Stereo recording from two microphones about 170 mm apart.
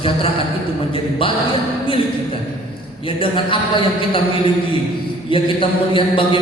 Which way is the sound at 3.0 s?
30° left (ahead or behind).